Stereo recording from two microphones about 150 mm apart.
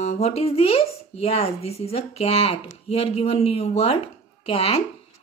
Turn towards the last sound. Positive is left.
turn(degrees=40)  # may be behind; listen again after turning